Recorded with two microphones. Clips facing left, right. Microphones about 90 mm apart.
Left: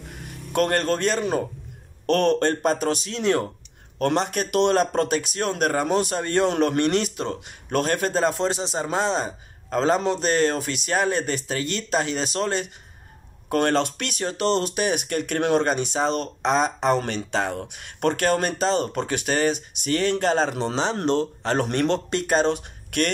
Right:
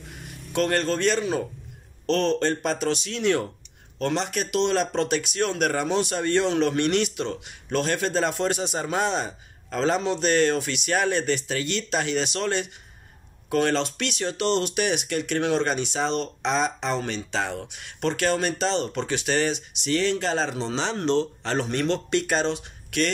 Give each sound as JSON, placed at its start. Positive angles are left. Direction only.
{"t": 0.5, "sound": "speech", "side_deg": 45}
{"t": 4.0, "sound": "speech", "side_deg": 50}
{"t": 13.5, "sound": "speech", "side_deg": 50}